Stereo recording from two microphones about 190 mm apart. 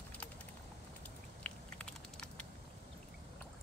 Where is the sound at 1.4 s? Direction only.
5° left (ahead or behind).